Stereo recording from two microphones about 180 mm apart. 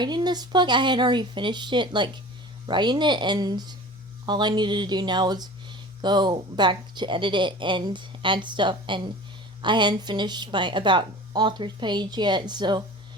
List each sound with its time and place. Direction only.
0.0 s a woman's voice: 25° right (ahead or behind)